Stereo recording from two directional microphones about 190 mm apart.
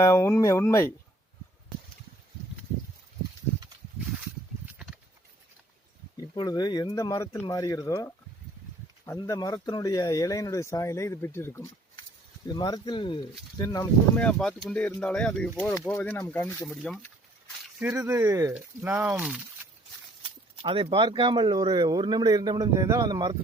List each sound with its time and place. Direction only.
0.0 s speech: 15° left (ahead or behind)
6.1 s speech: 20° left (ahead or behind)
9.1 s speech: 20° left (ahead or behind)
14.2 s speech: 5° left (ahead or behind)
16.6 s speech: centre (ahead or behind)
20.2 s speech: 25° right (ahead or behind)